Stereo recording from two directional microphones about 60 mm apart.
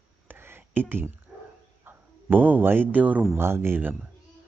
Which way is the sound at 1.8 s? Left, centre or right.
Right.